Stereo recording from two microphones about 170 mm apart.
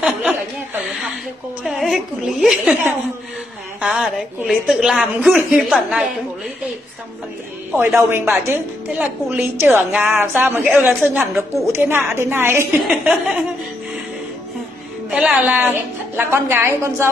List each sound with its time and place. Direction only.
0.0 s speech: 10° right (ahead or behind)
1.6 s a woman's voice: centre (ahead or behind)
7.7 s a woman's voice: 15° right (ahead or behind)
12.8 s a woman's voice: centre (ahead or behind)
15.0 s a woman's voice: 5° right (ahead or behind)